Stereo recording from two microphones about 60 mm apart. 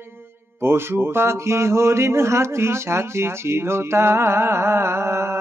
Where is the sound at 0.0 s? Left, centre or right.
Right.